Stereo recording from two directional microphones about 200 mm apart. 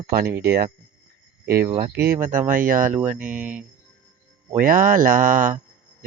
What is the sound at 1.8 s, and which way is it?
Speech, 50° right (ahead or behind).